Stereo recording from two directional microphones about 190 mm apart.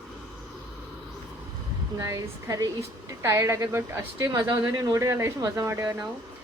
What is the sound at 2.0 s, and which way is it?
Speech, 15° right (ahead or behind).